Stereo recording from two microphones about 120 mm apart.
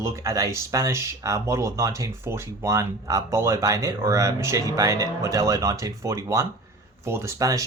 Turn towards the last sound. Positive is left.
turn(degrees=-30)  # may be behind; listen again after turning